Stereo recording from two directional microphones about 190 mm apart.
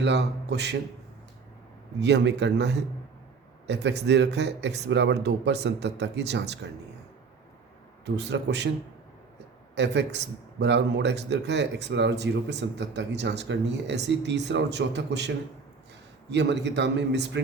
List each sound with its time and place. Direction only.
0.0 s a man's voice: 65° right (ahead or behind)
2.0 s a man's voice: 65° right (ahead or behind)
8.0 s a man's voice: 65° right (ahead or behind)
9.7 s a man's voice: 65° right (ahead or behind)
16.3 s a man's voice: 65° right (ahead or behind)